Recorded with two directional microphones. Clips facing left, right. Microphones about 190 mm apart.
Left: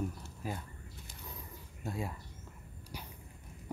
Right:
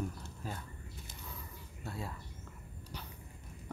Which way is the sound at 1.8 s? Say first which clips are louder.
Left 4 dB; 15° left (ahead or behind).